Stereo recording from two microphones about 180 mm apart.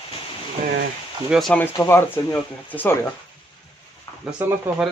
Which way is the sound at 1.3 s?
5° left (ahead or behind).